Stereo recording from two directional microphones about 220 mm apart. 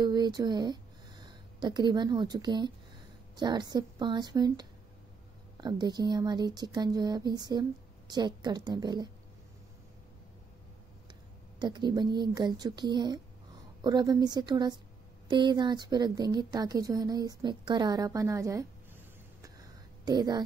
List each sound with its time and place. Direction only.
0.0 s a woman's voice: 20° right (ahead or behind)
11.6 s a woman's voice: 20° right (ahead or behind)
19.4 s a sound: 15° right (ahead or behind)